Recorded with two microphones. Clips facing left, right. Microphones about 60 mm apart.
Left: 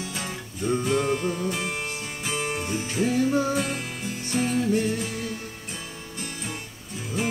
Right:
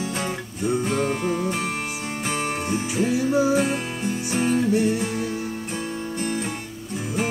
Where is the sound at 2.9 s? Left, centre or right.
Centre.